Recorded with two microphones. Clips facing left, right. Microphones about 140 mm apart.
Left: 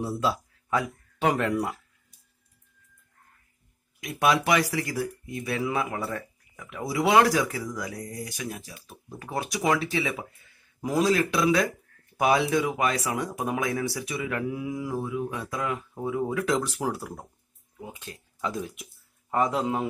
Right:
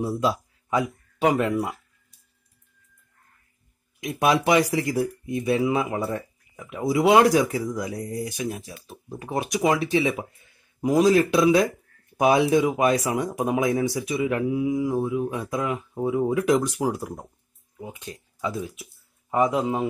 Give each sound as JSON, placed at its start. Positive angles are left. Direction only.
{"t": 0.0, "sound": "speech", "side_deg": -15}
{"t": 4.0, "sound": "a man's voice", "side_deg": -25}